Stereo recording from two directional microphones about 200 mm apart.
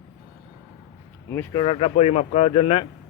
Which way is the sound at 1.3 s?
10° left (ahead or behind).